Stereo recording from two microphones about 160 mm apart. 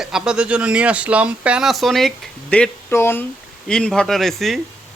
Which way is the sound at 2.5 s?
10° left (ahead or behind).